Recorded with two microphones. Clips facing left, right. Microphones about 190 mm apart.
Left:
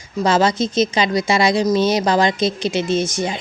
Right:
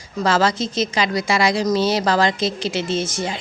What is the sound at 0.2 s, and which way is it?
Speech, 20° left (ahead or behind).